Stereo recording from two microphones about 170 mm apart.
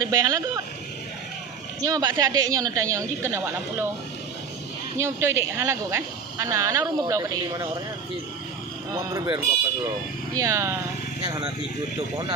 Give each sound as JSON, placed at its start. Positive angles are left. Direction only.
{"t": 0.0, "sound": "a woman's voice", "side_deg": -20}
{"t": 1.8, "sound": "a woman's voice", "side_deg": -20}
{"t": 4.9, "sound": "speech", "side_deg": -15}
{"t": 8.9, "sound": "a woman's voice", "side_deg": -20}
{"t": 11.2, "sound": "a woman's voice", "side_deg": -25}